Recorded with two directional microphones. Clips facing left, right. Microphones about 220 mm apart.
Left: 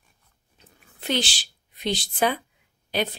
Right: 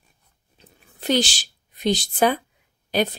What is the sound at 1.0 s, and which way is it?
A woman's voice, 40° right (ahead or behind).